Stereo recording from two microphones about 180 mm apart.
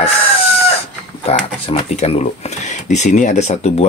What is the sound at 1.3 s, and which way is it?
Speech, 35° left (ahead or behind).